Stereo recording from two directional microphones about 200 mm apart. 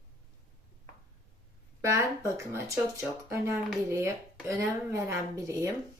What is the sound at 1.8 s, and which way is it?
Speech, 15° right (ahead or behind).